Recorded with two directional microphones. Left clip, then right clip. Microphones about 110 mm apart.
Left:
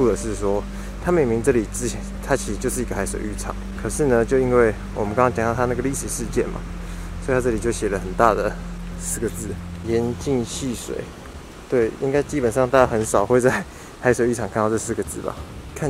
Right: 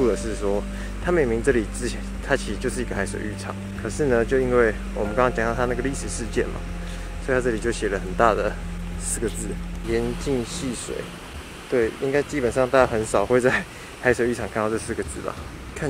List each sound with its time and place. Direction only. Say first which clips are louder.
0.0 s vehicle: left 2 dB; 20° left (ahead or behind)
0.4 s speech: left 2 dB; 20° left (ahead or behind)
1.8 s speech: left 2 dB; 20° left (ahead or behind)
11.7 s speech: left 2 dB; 35° left (ahead or behind)
12.4 s speech: left 2 dB; 20° left (ahead or behind)